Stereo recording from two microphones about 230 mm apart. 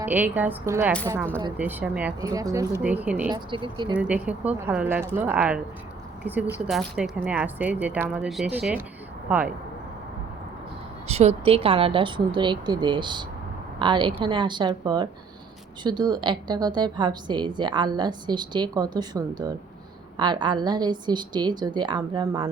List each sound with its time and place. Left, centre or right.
0.0 s speech: centre
3.3 s a woman's voice: right
3.9 s speech: centre
11.1 s a woman's voice: right